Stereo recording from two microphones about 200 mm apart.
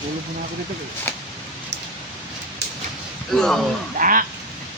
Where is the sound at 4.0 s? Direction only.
45° right (ahead or behind).